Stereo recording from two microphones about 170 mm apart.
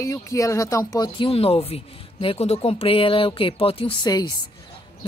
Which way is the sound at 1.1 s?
35° left (ahead or behind).